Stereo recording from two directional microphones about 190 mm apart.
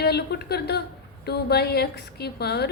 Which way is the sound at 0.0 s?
60° left (ahead or behind).